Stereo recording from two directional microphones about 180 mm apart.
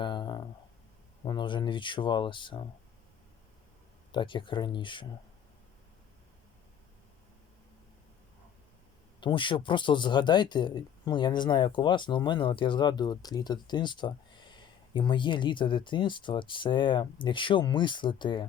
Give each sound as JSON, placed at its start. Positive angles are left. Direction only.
{"t": 0.0, "sound": "a sound", "side_deg": 25}
{"t": 1.2, "sound": "speech", "side_deg": 25}
{"t": 4.1, "sound": "speech", "side_deg": 25}
{"t": 9.2, "sound": "speech", "side_deg": 25}